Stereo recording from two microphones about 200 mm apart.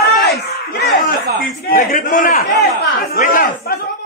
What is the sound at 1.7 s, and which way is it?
A man's voice, 45° left (ahead or behind).